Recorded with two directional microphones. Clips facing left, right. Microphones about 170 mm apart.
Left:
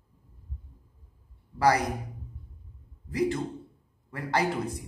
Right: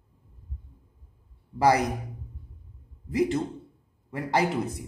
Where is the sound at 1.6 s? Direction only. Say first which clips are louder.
Right 2 dB; 20° right (ahead or behind).